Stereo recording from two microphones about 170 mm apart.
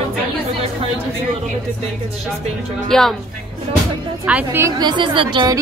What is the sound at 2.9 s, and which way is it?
Music, centre (ahead or behind).